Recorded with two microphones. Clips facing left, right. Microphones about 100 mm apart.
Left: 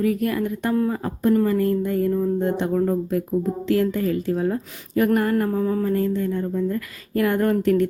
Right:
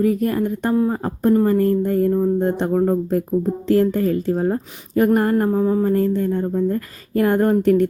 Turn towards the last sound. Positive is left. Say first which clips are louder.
# right 4 dB
turn(degrees=-35)  # may be behind; listen again after turning